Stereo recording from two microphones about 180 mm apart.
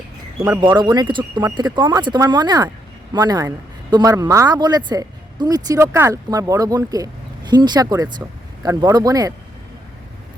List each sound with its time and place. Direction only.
0.6 s speech: 25° right (ahead or behind)